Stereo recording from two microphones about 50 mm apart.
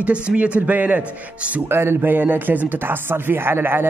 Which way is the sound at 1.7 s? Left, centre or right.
Right.